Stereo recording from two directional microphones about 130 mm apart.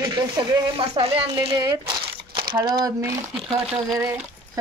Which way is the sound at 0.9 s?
45° right (ahead or behind).